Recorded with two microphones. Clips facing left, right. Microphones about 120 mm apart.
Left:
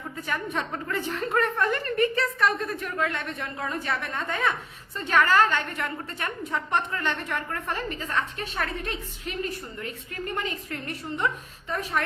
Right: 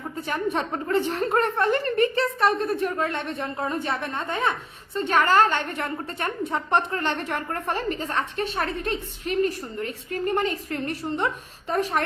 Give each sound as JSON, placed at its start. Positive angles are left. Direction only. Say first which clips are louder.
{"t": 0.2, "sound": "a woman's voice", "louder": "right 4 dB", "side_deg": -30}